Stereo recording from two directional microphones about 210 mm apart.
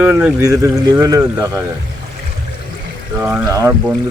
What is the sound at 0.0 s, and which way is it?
Speech, 5° right (ahead or behind).